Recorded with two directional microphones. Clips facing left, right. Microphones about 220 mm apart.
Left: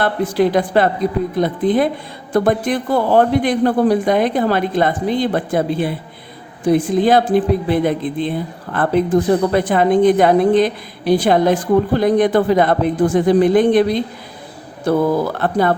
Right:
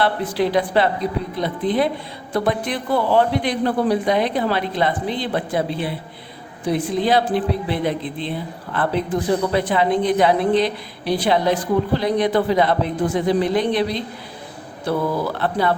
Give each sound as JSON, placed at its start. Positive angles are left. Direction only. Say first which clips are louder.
{"t": 0.0, "sound": "a woman's voice", "louder": "left 4 dB", "side_deg": 45}